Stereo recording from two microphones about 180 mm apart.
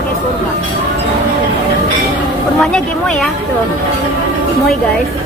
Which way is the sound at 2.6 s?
5° left (ahead or behind).